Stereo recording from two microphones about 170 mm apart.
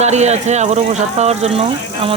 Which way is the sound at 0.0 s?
40° right (ahead or behind).